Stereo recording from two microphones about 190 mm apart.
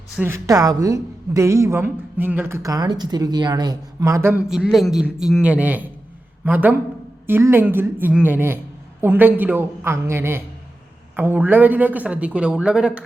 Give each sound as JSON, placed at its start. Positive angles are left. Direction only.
{"t": 0.2, "sound": "a woman's voice", "side_deg": -15}